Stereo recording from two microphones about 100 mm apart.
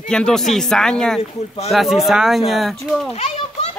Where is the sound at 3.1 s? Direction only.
90° left.